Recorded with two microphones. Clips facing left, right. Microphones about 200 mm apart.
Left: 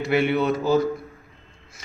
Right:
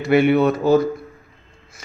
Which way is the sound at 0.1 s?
55° right (ahead or behind).